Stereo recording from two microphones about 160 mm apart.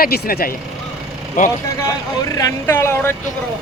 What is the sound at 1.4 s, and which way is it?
Speech, 55° left (ahead or behind).